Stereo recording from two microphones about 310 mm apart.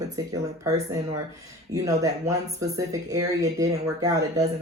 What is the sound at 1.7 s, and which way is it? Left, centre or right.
Speech, centre.